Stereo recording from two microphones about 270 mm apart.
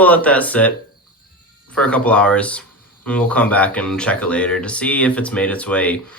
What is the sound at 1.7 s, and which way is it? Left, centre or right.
Speech, centre.